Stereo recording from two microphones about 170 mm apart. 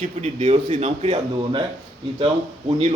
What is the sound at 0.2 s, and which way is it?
A man's voice, 40° right (ahead or behind).